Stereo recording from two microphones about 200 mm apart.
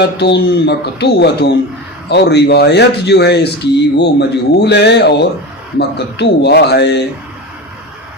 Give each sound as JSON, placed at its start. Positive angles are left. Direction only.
{"t": 0.0, "sound": "speech", "side_deg": 55}